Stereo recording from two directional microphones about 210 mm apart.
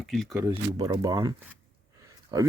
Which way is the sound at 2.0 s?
15° right (ahead or behind).